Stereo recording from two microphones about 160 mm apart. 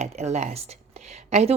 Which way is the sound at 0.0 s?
45° right (ahead or behind).